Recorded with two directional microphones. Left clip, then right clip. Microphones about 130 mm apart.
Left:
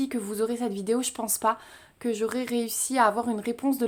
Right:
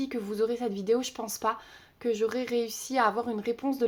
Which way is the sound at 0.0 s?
35° left (ahead or behind).